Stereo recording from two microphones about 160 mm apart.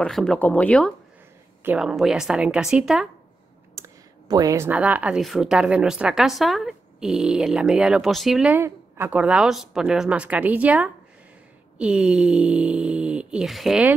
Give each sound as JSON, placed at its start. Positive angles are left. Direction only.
{"t": 0.0, "sound": "speech", "side_deg": 5}
{"t": 1.6, "sound": "speech", "side_deg": -10}
{"t": 3.7, "sound": "clicking", "side_deg": -20}
{"t": 4.6, "sound": "speech", "side_deg": -10}